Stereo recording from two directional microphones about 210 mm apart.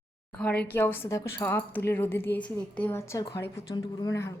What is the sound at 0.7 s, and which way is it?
A woman's voice, 10° left (ahead or behind).